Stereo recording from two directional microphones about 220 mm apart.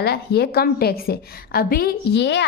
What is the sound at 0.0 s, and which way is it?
A woman's voice, 45° left (ahead or behind).